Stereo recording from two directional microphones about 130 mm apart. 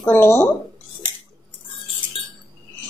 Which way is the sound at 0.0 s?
15° left (ahead or behind).